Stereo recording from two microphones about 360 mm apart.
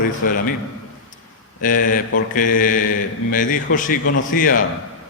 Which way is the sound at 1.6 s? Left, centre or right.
Left.